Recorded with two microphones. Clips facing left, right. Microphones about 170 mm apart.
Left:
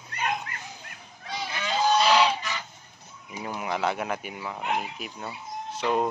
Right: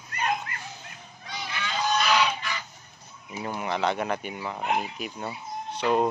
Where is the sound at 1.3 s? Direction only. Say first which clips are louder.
Left 3 dB; 30° left (ahead or behind).